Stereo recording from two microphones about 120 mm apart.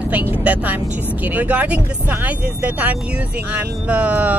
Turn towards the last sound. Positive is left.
turn(degrees=-15)  # may be behind; listen again after turning